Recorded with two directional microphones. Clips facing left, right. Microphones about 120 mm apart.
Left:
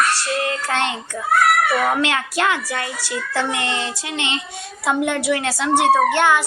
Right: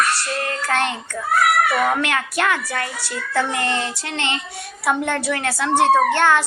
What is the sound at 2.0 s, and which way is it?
A woman's voice, 25° left (ahead or behind).